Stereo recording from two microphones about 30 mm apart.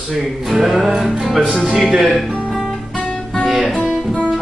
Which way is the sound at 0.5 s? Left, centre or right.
Centre.